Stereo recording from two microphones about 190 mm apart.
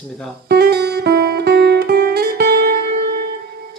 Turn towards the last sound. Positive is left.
turn(degrees=-55)  # may be behind; listen again after turning